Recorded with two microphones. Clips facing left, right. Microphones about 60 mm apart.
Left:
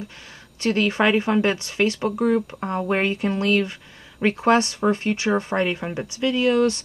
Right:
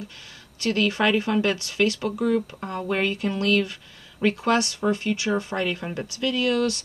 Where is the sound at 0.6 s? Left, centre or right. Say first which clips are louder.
Left 2 dB; left.